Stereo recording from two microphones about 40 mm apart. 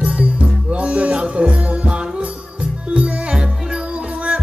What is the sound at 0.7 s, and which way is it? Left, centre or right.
Music, right.